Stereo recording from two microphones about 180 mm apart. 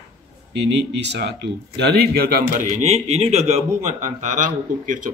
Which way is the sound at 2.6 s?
40° right (ahead or behind).